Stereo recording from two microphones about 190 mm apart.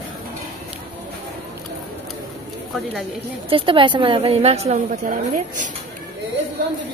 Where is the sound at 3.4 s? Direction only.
30° right (ahead or behind).